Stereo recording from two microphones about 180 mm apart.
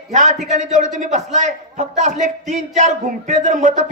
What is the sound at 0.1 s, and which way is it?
A man's voice, 45° right (ahead or behind).